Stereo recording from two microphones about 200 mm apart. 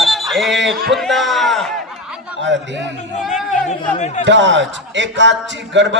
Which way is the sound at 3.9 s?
35° left (ahead or behind).